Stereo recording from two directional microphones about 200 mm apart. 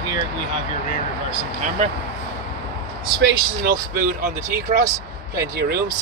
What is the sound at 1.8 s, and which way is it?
Speech, 35° right (ahead or behind).